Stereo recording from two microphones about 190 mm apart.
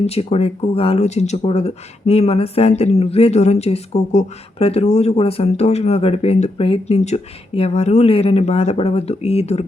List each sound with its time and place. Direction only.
0.0 s speech: 30° left (ahead or behind)